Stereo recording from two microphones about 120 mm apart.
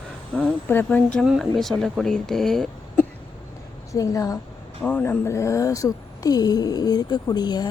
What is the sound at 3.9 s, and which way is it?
Speech, 25° left (ahead or behind).